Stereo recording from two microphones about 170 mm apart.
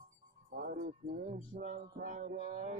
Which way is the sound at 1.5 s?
50° right (ahead or behind).